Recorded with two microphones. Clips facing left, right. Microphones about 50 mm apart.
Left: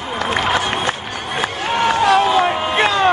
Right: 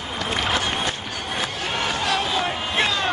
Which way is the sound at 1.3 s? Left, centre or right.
Left.